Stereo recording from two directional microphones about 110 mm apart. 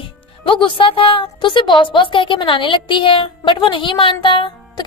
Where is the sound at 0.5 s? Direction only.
50° left (ahead or behind).